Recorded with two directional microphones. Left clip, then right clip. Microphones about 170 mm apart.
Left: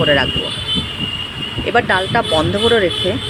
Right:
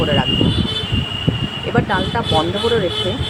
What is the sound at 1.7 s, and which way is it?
Speech, 10° left (ahead or behind).